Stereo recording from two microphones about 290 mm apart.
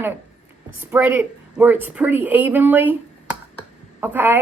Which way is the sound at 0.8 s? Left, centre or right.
Centre.